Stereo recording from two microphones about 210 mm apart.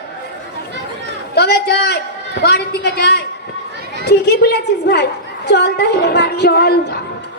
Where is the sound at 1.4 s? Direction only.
50° left (ahead or behind).